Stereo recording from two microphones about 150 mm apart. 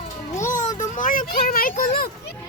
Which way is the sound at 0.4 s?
55° left (ahead or behind).